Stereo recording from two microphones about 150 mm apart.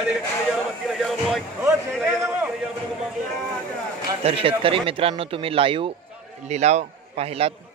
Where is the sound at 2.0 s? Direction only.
15° right (ahead or behind).